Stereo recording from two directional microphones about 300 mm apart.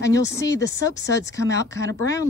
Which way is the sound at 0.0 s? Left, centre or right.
Centre.